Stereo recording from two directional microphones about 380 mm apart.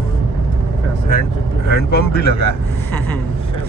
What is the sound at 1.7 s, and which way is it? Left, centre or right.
Speech, left.